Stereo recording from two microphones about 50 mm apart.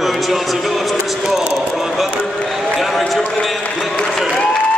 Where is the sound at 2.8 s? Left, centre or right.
Centre.